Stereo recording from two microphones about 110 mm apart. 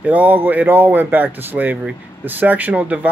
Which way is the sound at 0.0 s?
15° right (ahead or behind).